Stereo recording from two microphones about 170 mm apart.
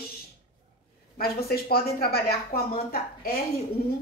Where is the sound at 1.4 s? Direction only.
65° left (ahead or behind).